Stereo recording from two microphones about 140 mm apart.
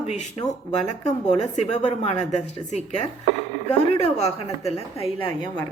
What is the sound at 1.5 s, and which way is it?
Speech, 50° left (ahead or behind).